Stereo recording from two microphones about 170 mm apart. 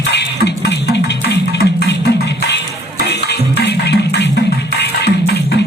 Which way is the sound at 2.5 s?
80° left.